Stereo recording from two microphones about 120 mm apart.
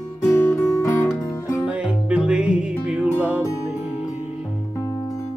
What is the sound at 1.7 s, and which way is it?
Music, 10° right (ahead or behind).